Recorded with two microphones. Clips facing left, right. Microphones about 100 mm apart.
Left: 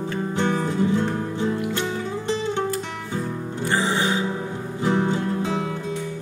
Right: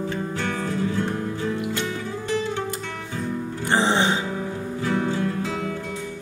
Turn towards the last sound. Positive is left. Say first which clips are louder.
# left 1 dB
turn(degrees=20)  # may be behind; listen again after turning